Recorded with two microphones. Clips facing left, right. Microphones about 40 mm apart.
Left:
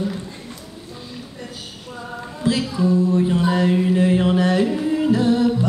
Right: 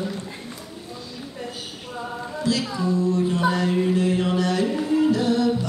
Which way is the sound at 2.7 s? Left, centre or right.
Centre.